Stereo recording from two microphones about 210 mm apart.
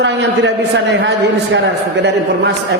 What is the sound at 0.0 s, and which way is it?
Speech, 55° right (ahead or behind).